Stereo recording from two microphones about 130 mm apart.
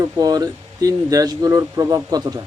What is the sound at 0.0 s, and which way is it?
Speech, 30° right (ahead or behind).